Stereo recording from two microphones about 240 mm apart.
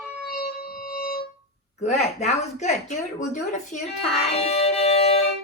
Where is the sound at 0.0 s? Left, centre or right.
Centre.